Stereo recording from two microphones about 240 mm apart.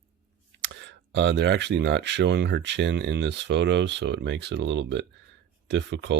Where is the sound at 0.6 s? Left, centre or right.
Right.